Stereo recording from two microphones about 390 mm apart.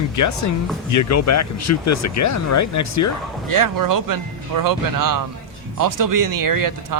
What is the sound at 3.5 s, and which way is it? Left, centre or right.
A man's voice, right.